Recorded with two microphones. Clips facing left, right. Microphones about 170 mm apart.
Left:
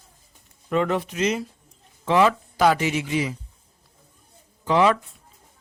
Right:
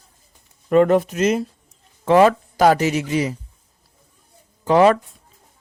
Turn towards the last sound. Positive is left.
turn(degrees=-45)  # may be behind; listen again after turning